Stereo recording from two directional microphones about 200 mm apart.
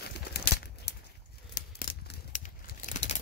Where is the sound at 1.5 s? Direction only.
50° left (ahead or behind).